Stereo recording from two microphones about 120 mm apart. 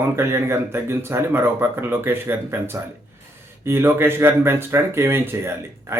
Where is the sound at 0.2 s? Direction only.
20° right (ahead or behind).